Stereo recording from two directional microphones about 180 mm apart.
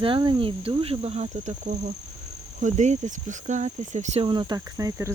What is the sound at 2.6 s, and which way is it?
Speech, 40° right (ahead or behind).